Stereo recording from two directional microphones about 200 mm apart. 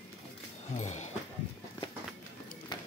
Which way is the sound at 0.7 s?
35° left (ahead or behind).